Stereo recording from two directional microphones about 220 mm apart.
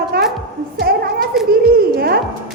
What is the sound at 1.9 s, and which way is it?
Music, 45° right (ahead or behind).